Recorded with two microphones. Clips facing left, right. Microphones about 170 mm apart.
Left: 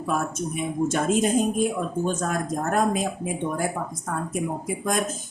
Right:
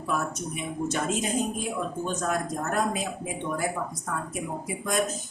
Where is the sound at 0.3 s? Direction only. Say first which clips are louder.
Left 6 dB; 50° left (ahead or behind).